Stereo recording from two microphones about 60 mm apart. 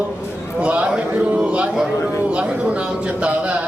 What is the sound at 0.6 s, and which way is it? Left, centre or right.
Speech, centre.